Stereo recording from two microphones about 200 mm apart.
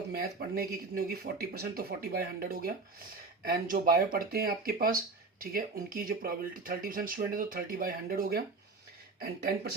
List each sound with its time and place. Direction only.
0.1 s speech: 50° right (ahead or behind)